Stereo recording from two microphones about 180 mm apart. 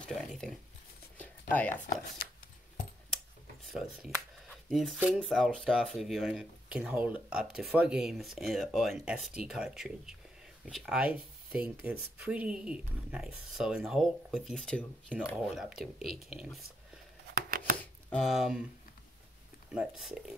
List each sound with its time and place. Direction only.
0.0 s a sound: centre (ahead or behind)
1.5 s speech: 10° left (ahead or behind)
3.7 s speech: centre (ahead or behind)
17.3 s chopping: 55° right (ahead or behind)
17.7 s a sound: 5° left (ahead or behind)
19.7 s speech: 5° right (ahead or behind)